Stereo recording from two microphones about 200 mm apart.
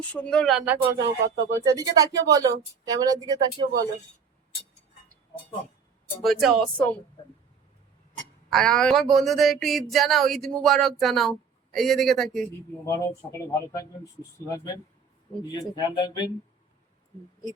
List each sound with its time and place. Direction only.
0.1 s speech: 5° left (ahead or behind)
1.0 s speech: 15° right (ahead or behind)
6.2 s speech: centre (ahead or behind)
8.5 s speech: 5° left (ahead or behind)
12.8 s speech: 15° left (ahead or behind)